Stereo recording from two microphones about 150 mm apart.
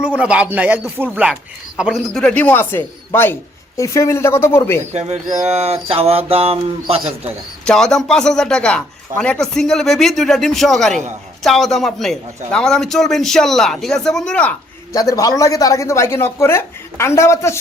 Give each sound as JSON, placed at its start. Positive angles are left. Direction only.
{"t": 0.0, "sound": "a man's voice", "side_deg": -10}
{"t": 2.2, "sound": "speech", "side_deg": 10}
{"t": 4.9, "sound": "bird", "side_deg": -45}
{"t": 7.6, "sound": "a man's voice", "side_deg": 5}
{"t": 14.9, "sound": "speech", "side_deg": 25}